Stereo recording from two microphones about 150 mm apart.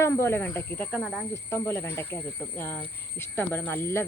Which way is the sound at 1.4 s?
15° left (ahead or behind).